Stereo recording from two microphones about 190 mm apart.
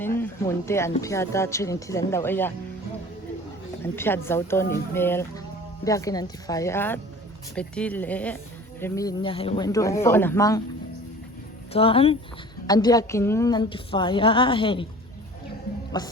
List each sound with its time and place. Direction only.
0.2 s speech: 15° left (ahead or behind)
3.9 s speech: 10° left (ahead or behind)
8.8 s a woman's voice: 20° left (ahead or behind)
9.6 s speech: 15° left (ahead or behind)
11.7 s a woman's voice: 30° left (ahead or behind)
15.9 s a woman's voice: 20° left (ahead or behind)